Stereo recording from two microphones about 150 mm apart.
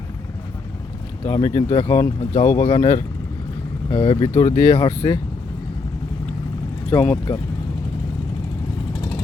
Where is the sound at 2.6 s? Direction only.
40° left (ahead or behind).